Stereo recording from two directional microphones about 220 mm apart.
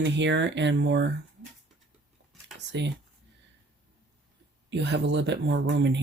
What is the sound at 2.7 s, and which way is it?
Speech, 50° right (ahead or behind).